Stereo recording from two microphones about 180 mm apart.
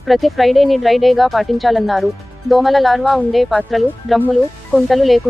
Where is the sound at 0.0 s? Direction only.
Centre (ahead or behind).